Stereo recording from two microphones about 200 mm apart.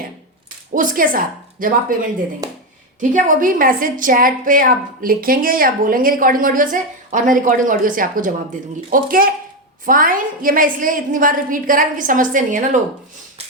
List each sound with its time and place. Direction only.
0.7 s a woman's voice: 40° right (ahead or behind)
2.4 s a sound: 20° right (ahead or behind)
3.0 s a woman's voice: 40° right (ahead or behind)